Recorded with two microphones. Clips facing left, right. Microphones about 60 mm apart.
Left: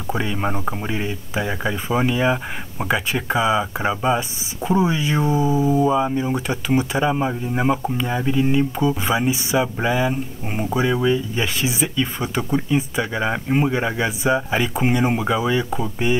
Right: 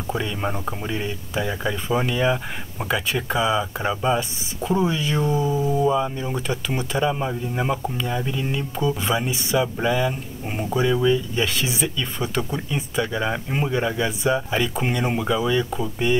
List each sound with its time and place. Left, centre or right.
0.2 s speech: centre
1.0 s speech: centre
12.4 s speech: centre
12.7 s speech: centre